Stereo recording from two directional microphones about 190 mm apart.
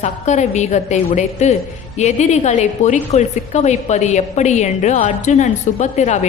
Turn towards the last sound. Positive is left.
turn(degrees=35)  # may be behind; listen again after turning